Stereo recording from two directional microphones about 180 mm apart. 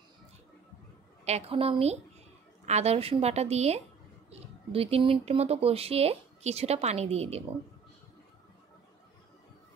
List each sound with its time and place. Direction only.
1.2 s speech: 35° right (ahead or behind)